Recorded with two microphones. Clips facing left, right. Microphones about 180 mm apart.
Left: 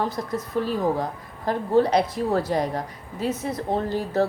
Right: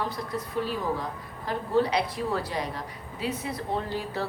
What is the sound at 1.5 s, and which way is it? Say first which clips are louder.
A woman's voice: left 5 dB; 45° left (ahead or behind).